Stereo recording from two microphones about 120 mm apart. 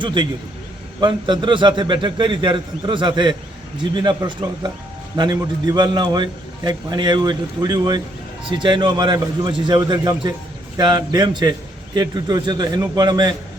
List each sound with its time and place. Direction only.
0.0 s a man's voice: 40° right (ahead or behind)